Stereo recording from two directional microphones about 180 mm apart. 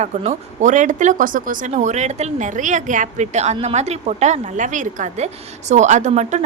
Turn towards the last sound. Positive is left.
turn(degrees=-40)  # may be behind; listen again after turning